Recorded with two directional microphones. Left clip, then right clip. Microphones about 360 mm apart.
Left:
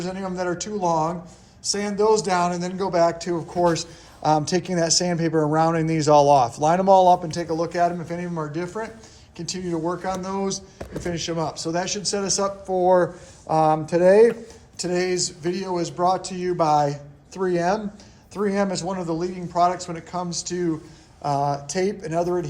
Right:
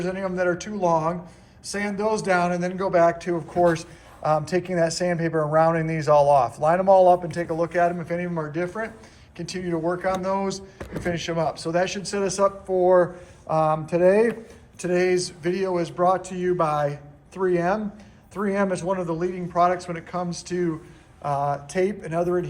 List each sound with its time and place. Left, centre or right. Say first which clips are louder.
0.0 s a man's voice: right 3 dB; centre